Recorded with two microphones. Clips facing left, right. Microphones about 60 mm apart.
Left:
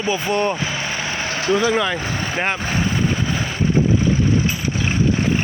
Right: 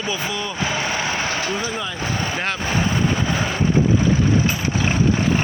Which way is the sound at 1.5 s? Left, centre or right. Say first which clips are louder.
Left 8 dB; left.